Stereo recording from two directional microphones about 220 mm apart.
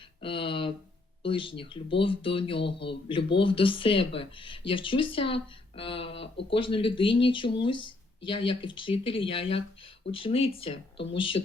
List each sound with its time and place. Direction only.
0.2 s speech: 25° left (ahead or behind)